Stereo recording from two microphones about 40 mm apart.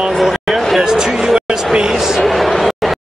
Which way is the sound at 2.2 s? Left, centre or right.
Centre.